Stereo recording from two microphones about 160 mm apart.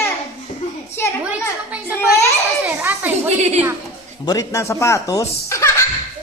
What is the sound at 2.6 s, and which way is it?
Children playing, 15° right (ahead or behind).